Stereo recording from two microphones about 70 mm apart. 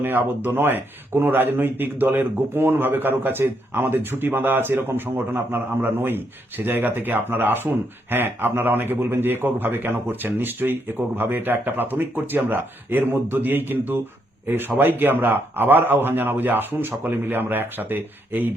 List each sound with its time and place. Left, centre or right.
0.0 s speech: right